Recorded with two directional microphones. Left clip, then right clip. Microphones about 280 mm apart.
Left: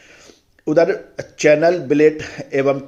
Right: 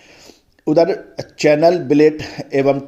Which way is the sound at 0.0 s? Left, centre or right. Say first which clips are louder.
Right 1 dB; right.